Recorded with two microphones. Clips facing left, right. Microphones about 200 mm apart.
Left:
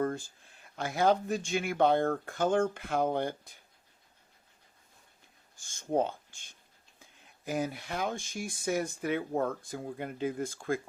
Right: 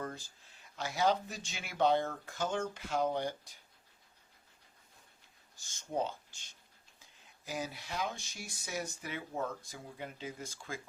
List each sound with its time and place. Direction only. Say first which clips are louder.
0.0 s speech: left 10 dB; 50° left (ahead or behind)
5.5 s speech: left 7 dB; 50° left (ahead or behind)